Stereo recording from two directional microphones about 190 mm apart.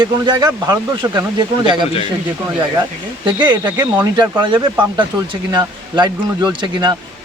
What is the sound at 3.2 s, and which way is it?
Speech, 25° right (ahead or behind).